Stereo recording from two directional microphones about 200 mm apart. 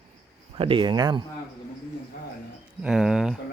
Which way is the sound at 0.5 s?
25° right (ahead or behind).